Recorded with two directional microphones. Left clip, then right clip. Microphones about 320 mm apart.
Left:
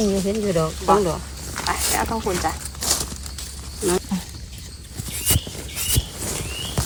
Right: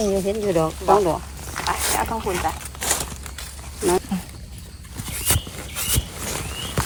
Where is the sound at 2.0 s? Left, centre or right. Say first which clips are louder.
Even; centre.